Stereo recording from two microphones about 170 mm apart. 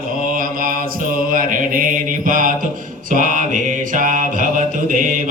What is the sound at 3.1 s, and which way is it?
Music, 50° right (ahead or behind).